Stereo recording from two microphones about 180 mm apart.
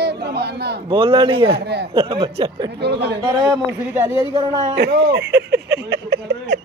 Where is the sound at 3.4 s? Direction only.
10° right (ahead or behind).